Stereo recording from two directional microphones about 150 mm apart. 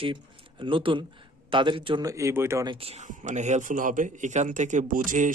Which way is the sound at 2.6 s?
35° right (ahead or behind).